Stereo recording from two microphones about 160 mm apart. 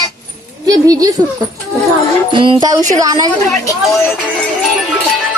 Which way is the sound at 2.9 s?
25° right (ahead or behind).